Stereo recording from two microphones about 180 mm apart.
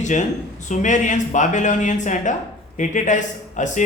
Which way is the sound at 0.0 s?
40° left (ahead or behind).